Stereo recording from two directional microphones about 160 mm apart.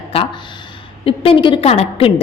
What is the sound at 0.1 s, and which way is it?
A woman's voice, 40° left (ahead or behind).